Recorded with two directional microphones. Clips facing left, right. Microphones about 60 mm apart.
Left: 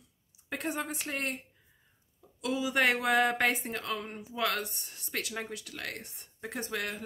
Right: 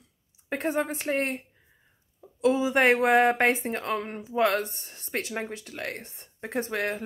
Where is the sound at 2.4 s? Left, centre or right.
Right.